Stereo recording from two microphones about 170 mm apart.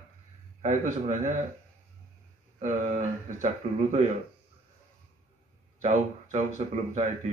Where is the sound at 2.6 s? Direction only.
45° right (ahead or behind).